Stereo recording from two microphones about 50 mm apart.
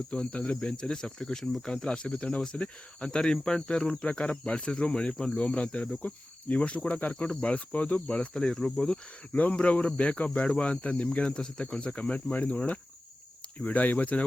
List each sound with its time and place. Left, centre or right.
0.1 s speech: left
5.4 s speech: left
8.4 s speech: centre
9.3 s speech: left